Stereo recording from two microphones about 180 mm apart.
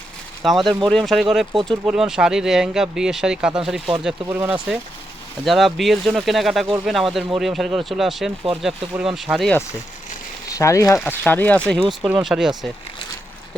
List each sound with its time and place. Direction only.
0.4 s speech: centre (ahead or behind)
10.5 s speech: 15° left (ahead or behind); by 12.7 s 5° right (ahead or behind)